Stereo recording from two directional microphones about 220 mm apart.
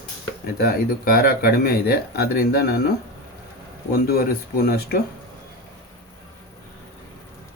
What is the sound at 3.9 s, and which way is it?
Speech, 45° left (ahead or behind).